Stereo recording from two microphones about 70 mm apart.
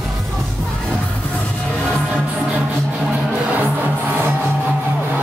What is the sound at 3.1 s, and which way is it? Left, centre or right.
Music, right.